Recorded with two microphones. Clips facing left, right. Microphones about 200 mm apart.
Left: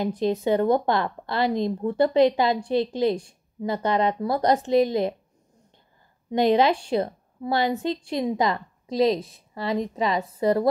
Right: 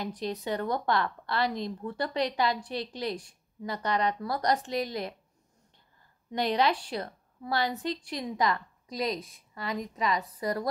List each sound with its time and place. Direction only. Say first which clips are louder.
0.0 s a woman's voice: left 10 dB; 25° left (ahead or behind)
6.3 s a woman's voice: left 8 dB; 25° left (ahead or behind)